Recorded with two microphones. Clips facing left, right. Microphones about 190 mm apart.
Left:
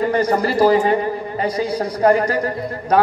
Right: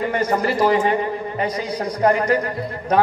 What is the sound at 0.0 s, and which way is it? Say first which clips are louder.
A man's voice: left 3 dB; 35° left (ahead or behind).